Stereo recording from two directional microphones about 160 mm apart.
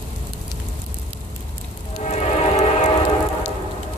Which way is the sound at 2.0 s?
45° left (ahead or behind).